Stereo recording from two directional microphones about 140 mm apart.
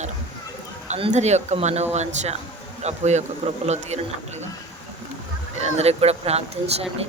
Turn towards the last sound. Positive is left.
turn(degrees=-50)  # may be behind; listen again after turning